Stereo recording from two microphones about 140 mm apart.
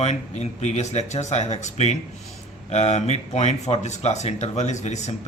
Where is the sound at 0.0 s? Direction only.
50° left (ahead or behind).